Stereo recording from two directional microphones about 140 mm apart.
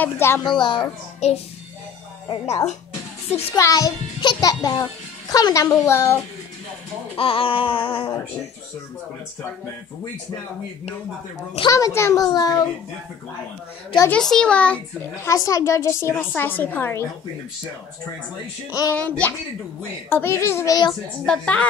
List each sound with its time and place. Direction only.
0.0 s a child's voice: 15° left (ahead or behind)
0.5 s a sound: 35° left (ahead or behind)
1.2 s speech: 50° left (ahead or behind)
2.4 s speech: 50° left (ahead or behind)
3.5 s a woman's voice: 25° left (ahead or behind)
7.2 s a sound: 40° left (ahead or behind)
11.7 s a woman's voice: 20° left (ahead or behind)
14.1 s a child's voice: 5° left (ahead or behind)
15.1 s a woman's voice: 20° left (ahead or behind)
18.7 s a woman's voice: 25° left (ahead or behind)
18.9 s a child's voice: 10° left (ahead or behind)
21.3 s a child's voice: 10° left (ahead or behind)